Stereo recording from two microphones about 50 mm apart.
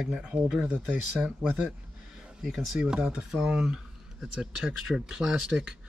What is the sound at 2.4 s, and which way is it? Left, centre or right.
Speech, centre.